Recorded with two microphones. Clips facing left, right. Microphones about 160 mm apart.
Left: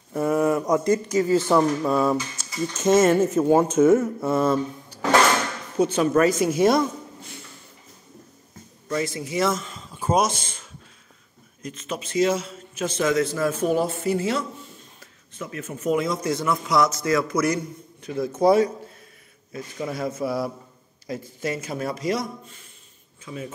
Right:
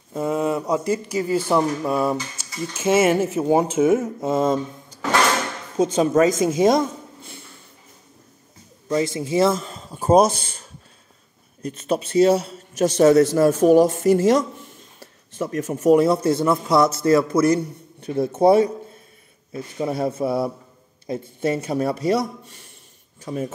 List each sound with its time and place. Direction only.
0.1 s a sound: 20° right (ahead or behind)
0.7 s speech: 10° right (ahead or behind)
5.8 s a man's voice: 25° right (ahead or behind)
8.8 s a man's voice: 25° right (ahead or behind)
23.2 s speech: 45° right (ahead or behind)